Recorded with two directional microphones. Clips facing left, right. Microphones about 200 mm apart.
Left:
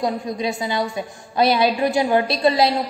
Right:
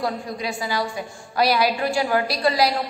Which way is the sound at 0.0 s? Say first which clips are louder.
Left 4 dB; 20° left (ahead or behind).